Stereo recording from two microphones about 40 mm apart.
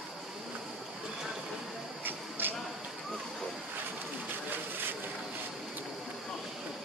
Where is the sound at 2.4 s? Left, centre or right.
Right.